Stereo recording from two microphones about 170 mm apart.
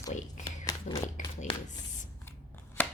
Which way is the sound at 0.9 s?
45° left (ahead or behind).